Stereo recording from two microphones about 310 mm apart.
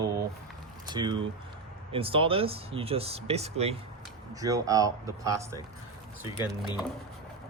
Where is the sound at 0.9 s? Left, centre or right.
Centre.